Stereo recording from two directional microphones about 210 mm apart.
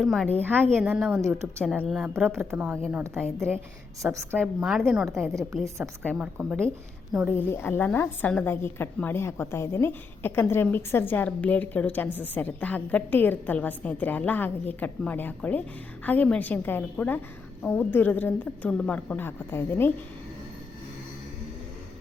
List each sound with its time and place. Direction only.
0.0 s a woman's voice: centre (ahead or behind); by 5.5 s 15° right (ahead or behind)
6.1 s a woman's voice: 5° right (ahead or behind)
7.3 s a woman's voice: 10° left (ahead or behind)